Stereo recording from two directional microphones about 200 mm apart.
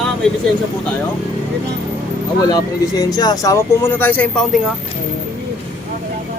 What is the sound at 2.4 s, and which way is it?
Speech, 20° left (ahead or behind).